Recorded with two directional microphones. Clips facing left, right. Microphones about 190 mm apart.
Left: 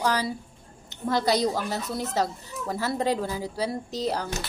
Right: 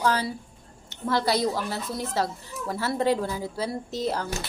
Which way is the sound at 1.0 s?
20° left (ahead or behind).